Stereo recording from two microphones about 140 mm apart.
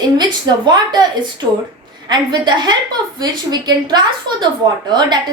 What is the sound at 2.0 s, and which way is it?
A woman's voice, 30° right (ahead or behind).